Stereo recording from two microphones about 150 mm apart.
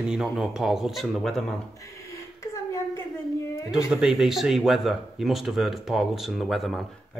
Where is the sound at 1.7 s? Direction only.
20° left (ahead or behind).